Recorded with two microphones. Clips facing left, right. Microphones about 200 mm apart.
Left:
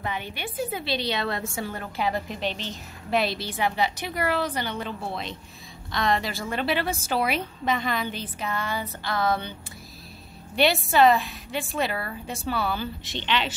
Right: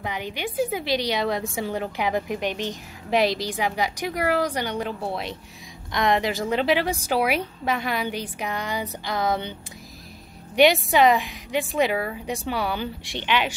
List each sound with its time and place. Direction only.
0.0 s a woman's voice: 15° right (ahead or behind)